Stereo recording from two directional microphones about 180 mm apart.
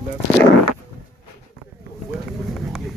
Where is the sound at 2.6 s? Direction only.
Centre (ahead or behind).